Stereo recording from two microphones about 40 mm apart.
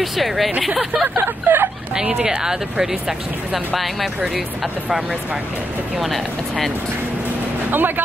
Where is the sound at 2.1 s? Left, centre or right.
Centre.